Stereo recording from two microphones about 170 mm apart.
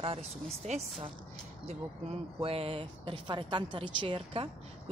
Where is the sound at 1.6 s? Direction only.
35° right (ahead or behind).